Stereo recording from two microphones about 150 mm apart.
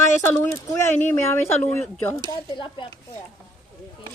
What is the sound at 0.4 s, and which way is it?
Speech, 20° left (ahead or behind).